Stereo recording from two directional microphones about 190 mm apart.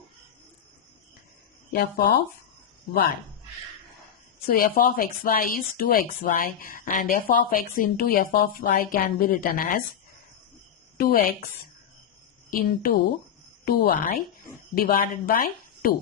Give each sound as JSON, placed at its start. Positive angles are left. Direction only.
{"t": 1.7, "sound": "speech", "side_deg": 55}
{"t": 4.4, "sound": "speech", "side_deg": 50}
{"t": 10.9, "sound": "a woman's voice", "side_deg": 50}
{"t": 12.5, "sound": "a woman's voice", "side_deg": 50}